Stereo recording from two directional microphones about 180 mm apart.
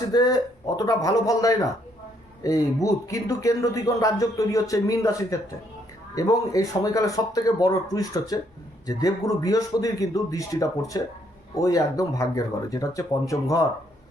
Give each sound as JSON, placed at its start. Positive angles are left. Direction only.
{"t": 0.1, "sound": "speech", "side_deg": 20}